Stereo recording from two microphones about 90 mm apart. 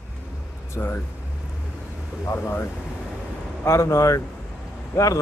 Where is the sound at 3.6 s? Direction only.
30° left (ahead or behind).